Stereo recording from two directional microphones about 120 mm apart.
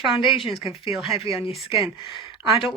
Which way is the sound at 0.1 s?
45° left (ahead or behind).